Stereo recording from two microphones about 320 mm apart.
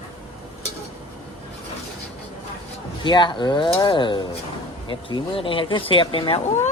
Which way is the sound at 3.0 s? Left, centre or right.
Centre.